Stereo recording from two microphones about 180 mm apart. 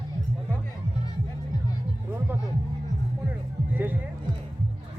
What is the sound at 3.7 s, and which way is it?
Music, 10° right (ahead or behind).